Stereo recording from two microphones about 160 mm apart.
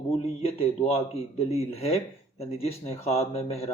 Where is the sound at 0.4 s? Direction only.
35° left (ahead or behind).